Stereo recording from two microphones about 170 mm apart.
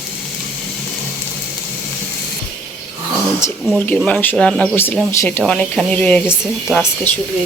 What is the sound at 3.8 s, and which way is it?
Speech, 10° left (ahead or behind).